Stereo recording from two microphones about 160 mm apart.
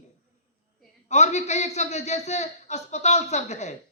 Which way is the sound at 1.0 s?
45° left (ahead or behind).